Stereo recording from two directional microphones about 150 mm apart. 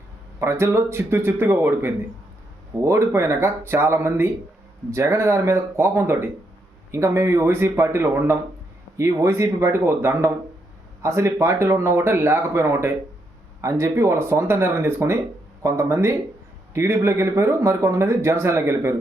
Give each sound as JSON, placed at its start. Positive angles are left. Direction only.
{"t": 0.3, "sound": "speech", "side_deg": -20}